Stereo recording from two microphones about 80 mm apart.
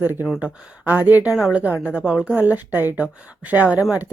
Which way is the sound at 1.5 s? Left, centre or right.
Centre.